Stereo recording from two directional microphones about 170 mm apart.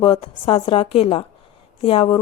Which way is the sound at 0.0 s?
30° left (ahead or behind).